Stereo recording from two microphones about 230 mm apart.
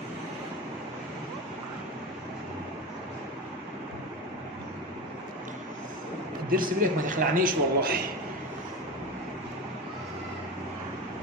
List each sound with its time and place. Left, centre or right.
6.5 s a man's voice: right